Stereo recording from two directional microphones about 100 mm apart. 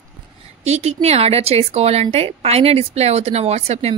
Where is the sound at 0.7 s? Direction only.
90° right.